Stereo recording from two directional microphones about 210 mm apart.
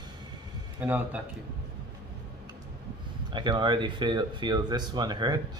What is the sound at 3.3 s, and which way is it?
Speech, 20° right (ahead or behind).